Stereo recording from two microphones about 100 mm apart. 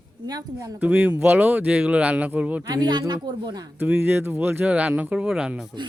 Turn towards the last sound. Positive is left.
turn(degrees=-5)  # may be behind; listen again after turning